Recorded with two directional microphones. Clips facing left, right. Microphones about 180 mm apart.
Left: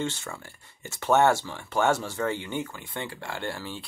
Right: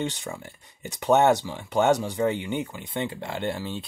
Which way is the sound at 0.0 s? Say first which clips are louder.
Right 2 dB; 15° right (ahead or behind).